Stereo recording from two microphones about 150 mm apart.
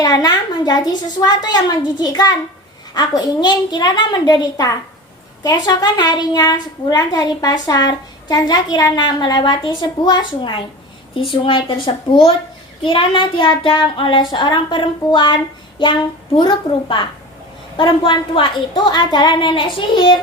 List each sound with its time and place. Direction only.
0.0 s a woman's voice: 25° left (ahead or behind)
11.1 s child singing: 35° left (ahead or behind)